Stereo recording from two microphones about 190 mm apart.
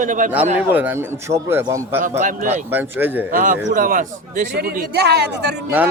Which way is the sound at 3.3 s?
45° right (ahead or behind).